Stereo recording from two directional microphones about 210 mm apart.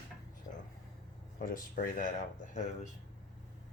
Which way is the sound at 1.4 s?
40° left (ahead or behind).